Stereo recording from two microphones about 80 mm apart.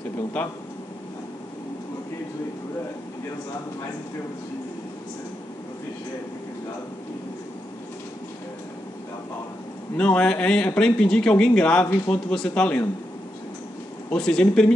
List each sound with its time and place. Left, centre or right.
0.4 s speech: centre
9.9 s speech: centre
14.1 s speech: centre